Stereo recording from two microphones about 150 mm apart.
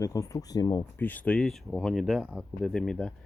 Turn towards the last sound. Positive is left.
turn(degrees=5)  # may be behind; listen again after turning